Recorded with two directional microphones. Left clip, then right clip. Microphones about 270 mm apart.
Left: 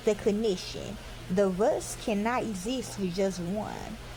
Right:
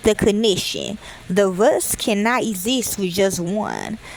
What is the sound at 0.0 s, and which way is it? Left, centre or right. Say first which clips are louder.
Speech: right 10 dB; right.